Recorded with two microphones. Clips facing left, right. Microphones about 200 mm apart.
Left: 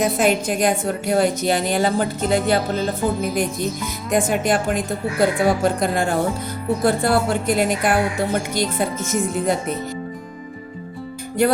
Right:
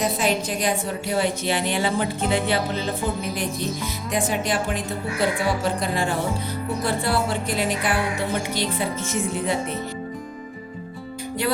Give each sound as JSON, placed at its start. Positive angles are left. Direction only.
{"t": 0.0, "sound": "a woman's voice", "side_deg": 50}